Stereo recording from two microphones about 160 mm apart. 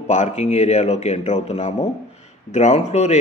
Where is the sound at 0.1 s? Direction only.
45° left (ahead or behind).